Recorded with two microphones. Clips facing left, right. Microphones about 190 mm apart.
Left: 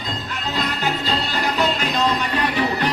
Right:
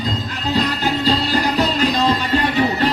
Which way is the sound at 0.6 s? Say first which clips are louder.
Right 4 dB; 35° right (ahead or behind).